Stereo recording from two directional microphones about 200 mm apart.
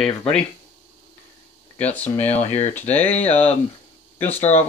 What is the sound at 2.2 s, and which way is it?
Speech, 35° left (ahead or behind).